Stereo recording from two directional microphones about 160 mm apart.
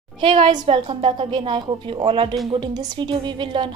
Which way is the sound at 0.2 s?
30° right (ahead or behind).